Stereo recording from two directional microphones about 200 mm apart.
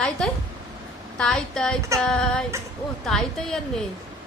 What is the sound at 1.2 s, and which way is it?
A woman's voice, 5° left (ahead or behind).